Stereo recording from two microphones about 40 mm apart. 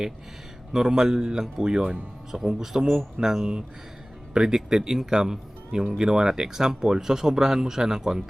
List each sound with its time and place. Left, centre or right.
0.7 s speech: centre